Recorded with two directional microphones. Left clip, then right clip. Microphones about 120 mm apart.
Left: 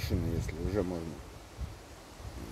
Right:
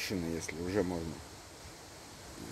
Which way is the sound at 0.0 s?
15° left (ahead or behind).